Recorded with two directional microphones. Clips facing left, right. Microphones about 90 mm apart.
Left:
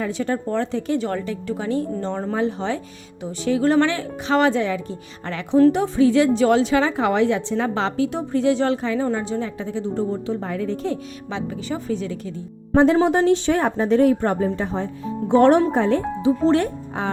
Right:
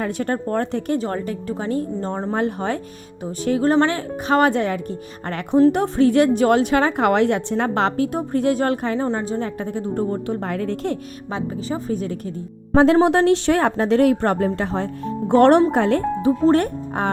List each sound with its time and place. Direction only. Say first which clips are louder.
0.0 s a woman's voice: right 1 dB; 50° right (ahead or behind)
1.0 s a woman's voice: even; 40° right (ahead or behind)
2.3 s a woman's voice: right 1 dB; 50° right (ahead or behind)
9.1 s a woman's voice: right 1 dB; 35° right (ahead or behind)
9.6 s a woman's voice: right 1 dB; 55° right (ahead or behind)
11.3 s a woman's voice: right 2 dB; 40° right (ahead or behind)
12.7 s speech: right 2 dB; 90° right; by 17.1 s 55° right (ahead or behind)